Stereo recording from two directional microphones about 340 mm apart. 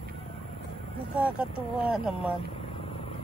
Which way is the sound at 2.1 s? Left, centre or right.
Centre.